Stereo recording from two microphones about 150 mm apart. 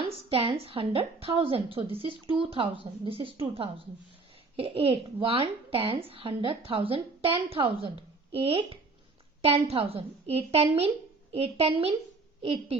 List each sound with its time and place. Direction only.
0.0 s a child's voice: 40° right (ahead or behind)